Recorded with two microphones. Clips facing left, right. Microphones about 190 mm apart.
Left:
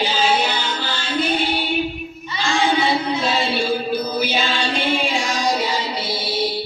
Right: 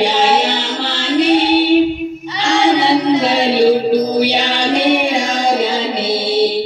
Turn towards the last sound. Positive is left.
turn(degrees=-60)  # may be behind; listen again after turning